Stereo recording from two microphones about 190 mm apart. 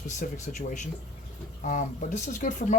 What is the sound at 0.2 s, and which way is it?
Speech, 40° left (ahead or behind).